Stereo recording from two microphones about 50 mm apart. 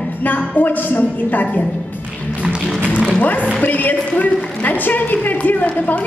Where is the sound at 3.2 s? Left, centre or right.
Left.